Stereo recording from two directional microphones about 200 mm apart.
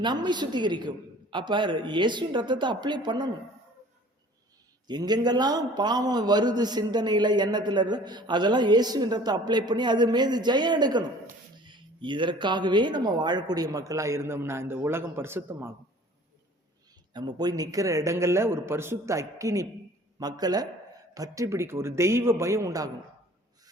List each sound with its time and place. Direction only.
0.0 s a man's voice: 20° right (ahead or behind)
4.9 s a man's voice: 20° right (ahead or behind)
17.2 s a man's voice: 20° right (ahead or behind)